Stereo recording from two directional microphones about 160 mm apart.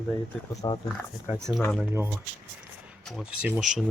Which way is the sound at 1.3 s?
Centre (ahead or behind).